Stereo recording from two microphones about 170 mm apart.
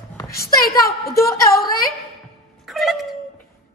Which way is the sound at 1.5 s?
20° left (ahead or behind).